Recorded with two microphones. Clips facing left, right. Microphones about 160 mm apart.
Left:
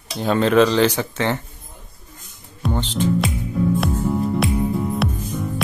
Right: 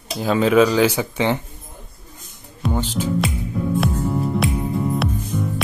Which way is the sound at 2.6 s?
10° right (ahead or behind).